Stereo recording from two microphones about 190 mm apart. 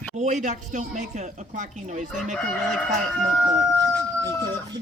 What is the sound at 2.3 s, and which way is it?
Speech, centre (ahead or behind).